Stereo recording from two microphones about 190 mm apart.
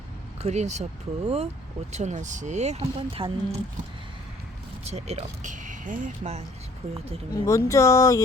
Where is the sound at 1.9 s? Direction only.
35° right (ahead or behind).